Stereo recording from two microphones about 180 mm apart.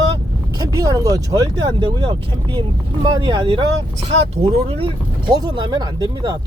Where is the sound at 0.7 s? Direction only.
20° right (ahead or behind).